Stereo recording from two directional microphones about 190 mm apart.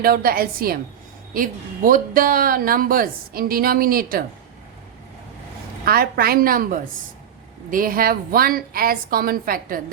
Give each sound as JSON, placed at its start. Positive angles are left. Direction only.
{"t": 0.0, "sound": "speech", "side_deg": -50}
{"t": 5.8, "sound": "speech", "side_deg": -50}